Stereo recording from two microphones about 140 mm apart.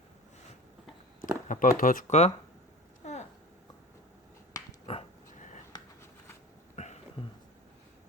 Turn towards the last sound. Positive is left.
turn(degrees=55)  # may be behind; listen again after turning